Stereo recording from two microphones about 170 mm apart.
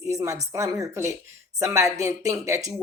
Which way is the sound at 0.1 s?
20° right (ahead or behind).